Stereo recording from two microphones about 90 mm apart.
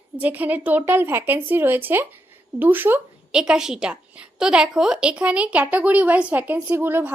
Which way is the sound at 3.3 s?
10° right (ahead or behind).